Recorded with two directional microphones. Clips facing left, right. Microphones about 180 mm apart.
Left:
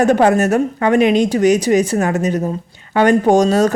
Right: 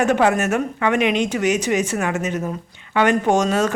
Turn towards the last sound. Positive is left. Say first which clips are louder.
# left 6 dB
turn(degrees=35)  # may be behind; listen again after turning